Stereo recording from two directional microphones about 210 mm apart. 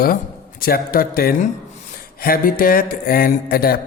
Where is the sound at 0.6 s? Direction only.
45° left (ahead or behind).